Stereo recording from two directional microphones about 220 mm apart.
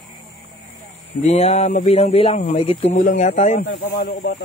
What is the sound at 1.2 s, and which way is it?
Speech, 30° left (ahead or behind).